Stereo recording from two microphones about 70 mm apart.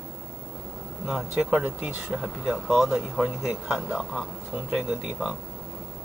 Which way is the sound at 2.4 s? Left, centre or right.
Centre.